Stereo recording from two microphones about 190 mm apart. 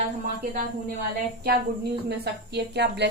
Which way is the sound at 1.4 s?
60° right (ahead or behind).